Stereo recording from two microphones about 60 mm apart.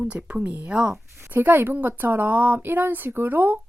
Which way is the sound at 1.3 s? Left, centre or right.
Right.